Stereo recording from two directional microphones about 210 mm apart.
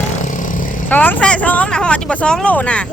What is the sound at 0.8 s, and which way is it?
Speech, 10° left (ahead or behind).